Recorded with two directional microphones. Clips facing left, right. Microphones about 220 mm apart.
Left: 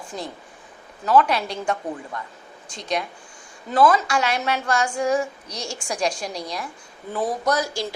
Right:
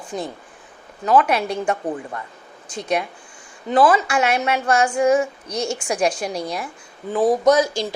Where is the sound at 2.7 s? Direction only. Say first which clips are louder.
Right 4 dB; 5° right (ahead or behind).